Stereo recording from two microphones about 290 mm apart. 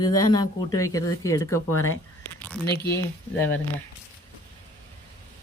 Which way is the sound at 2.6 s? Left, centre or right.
Left.